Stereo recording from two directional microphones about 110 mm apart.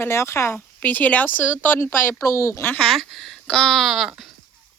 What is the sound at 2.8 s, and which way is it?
Speech, centre (ahead or behind).